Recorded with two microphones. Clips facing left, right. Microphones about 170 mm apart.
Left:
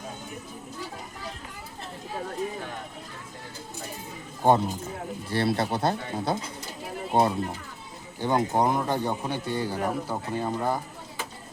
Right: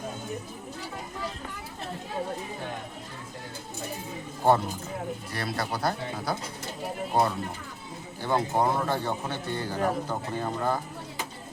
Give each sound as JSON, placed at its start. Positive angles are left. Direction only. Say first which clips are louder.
{"t": 4.4, "sound": "a man's voice", "louder": "left 1 dB", "side_deg": 15}
{"t": 5.3, "sound": "a man's voice", "louder": "left 9 dB", "side_deg": 30}